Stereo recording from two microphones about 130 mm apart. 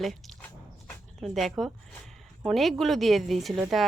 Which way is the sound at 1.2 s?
Centre (ahead or behind).